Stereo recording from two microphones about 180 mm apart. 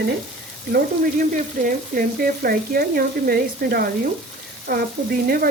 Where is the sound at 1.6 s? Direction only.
55° right (ahead or behind).